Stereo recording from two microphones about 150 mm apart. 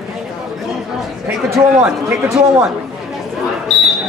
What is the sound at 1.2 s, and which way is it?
A man's voice, 10° right (ahead or behind).